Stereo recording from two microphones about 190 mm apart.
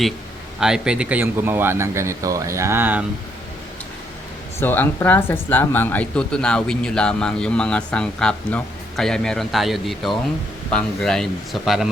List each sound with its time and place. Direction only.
0.6 s speech: 5° right (ahead or behind)
4.6 s speech: 10° left (ahead or behind)